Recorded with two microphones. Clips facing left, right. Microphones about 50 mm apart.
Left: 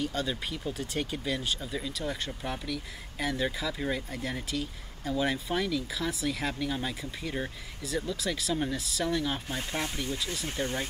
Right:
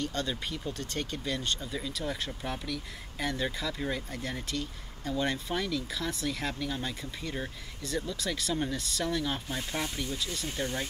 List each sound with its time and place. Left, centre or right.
0.0 s speech: centre
9.6 s speech: centre
10.1 s speech: centre